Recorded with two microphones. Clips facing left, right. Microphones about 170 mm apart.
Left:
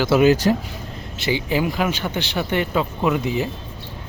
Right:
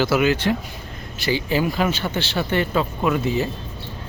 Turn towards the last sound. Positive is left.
turn(degrees=15)  # may be behind; listen again after turning